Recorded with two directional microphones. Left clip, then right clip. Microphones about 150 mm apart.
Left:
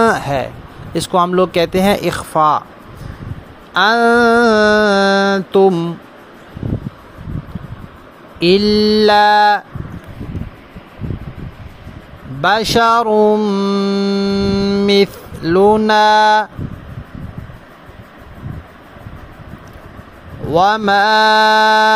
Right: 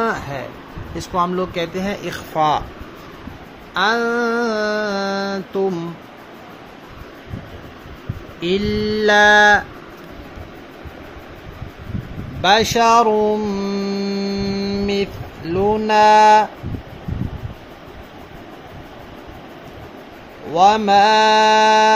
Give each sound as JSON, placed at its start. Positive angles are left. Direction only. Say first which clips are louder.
{"t": 0.0, "sound": "music", "louder": "left 8 dB", "side_deg": 85}
{"t": 0.9, "sound": "speech", "louder": "left 7 dB", "side_deg": 65}
{"t": 3.7, "sound": "mantra", "louder": "left 7 dB", "side_deg": 65}
{"t": 8.4, "sound": "speech", "louder": "left 8 dB", "side_deg": 60}
{"t": 12.4, "sound": "mantra", "louder": "left 2 dB", "side_deg": 55}
{"t": 20.5, "sound": "speech", "louder": "left 1 dB", "side_deg": 55}